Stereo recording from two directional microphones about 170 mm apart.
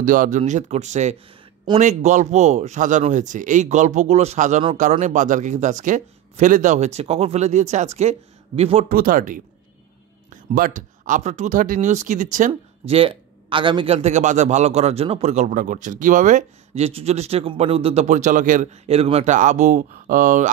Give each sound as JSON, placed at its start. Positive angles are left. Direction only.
{"t": 0.0, "sound": "speech", "side_deg": -50}
{"t": 8.8, "sound": "speech", "side_deg": -55}
{"t": 12.9, "sound": "a man's voice", "side_deg": -30}